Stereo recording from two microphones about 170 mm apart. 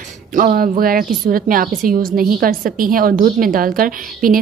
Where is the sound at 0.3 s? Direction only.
50° right (ahead or behind).